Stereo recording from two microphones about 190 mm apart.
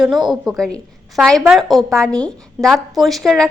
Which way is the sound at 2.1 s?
20° right (ahead or behind).